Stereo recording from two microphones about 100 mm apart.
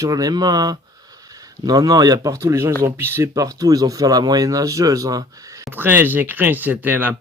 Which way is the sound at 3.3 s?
35° right (ahead or behind).